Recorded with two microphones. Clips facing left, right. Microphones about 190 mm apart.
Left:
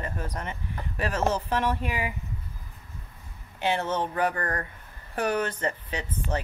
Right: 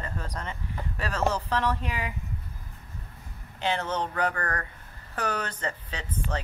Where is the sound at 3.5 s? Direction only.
15° left (ahead or behind).